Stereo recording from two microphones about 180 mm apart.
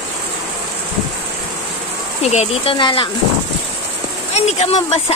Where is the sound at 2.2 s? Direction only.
35° left (ahead or behind).